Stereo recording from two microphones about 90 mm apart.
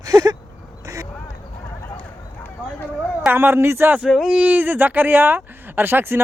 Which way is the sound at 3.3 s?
25° right (ahead or behind).